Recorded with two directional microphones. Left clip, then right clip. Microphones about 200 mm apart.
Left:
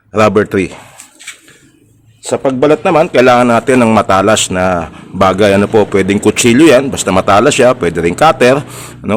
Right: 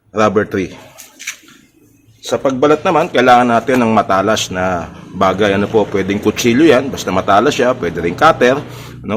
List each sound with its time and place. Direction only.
0.1 s a man's voice: 60° left (ahead or behind)
2.2 s a man's voice: 50° left (ahead or behind)